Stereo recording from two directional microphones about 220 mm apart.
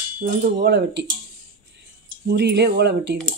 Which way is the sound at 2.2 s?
50° right (ahead or behind).